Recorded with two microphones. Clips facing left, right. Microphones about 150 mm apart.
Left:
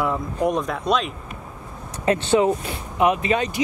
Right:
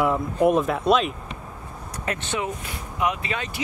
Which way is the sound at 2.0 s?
30° left (ahead or behind).